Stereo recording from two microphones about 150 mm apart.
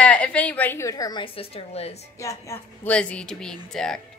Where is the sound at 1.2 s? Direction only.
40° left (ahead or behind).